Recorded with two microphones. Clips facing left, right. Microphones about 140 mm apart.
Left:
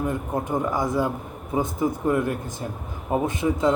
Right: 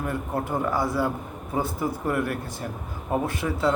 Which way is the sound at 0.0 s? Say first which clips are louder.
Left 2 dB; 20° left (ahead or behind).